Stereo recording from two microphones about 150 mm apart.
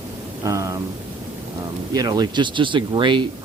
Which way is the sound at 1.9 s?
25° right (ahead or behind).